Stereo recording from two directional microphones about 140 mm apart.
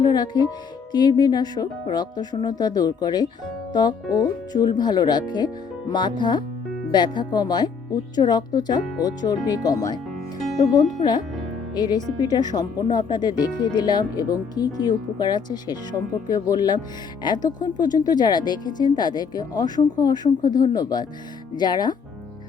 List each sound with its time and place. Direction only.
0.0 s speech: 30° left (ahead or behind)